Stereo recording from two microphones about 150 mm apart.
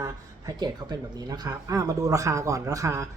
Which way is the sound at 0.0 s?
25° right (ahead or behind).